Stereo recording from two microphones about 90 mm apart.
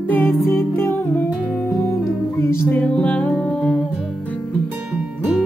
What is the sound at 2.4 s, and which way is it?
Music, 25° left (ahead or behind).